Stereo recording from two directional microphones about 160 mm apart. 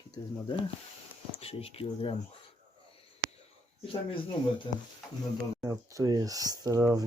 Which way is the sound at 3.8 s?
35° left (ahead or behind).